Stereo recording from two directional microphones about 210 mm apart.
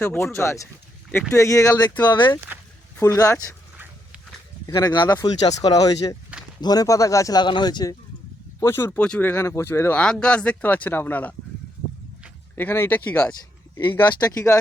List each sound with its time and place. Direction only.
0.0 s speech: 10° left (ahead or behind)
4.7 s speech: 20° left (ahead or behind)
12.5 s speech: 10° left (ahead or behind)